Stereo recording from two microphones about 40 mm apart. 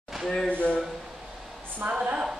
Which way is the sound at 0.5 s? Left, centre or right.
Left.